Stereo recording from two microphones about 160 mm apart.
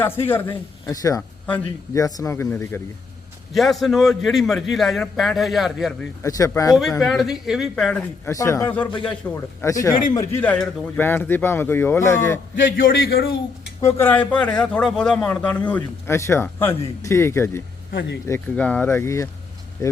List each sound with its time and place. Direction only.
0.0 s speech: 15° left (ahead or behind)
1.5 s speech: 10° left (ahead or behind)
2.0 s speech: 20° left (ahead or behind)
3.5 s a man's voice: centre (ahead or behind)
6.2 s speech: 20° left (ahead or behind)
7.0 s a man's voice: centre (ahead or behind)
8.3 s speech: 20° left (ahead or behind)
12.7 s a man's voice: 75° left (ahead or behind)
13.8 s speech: 15° left (ahead or behind)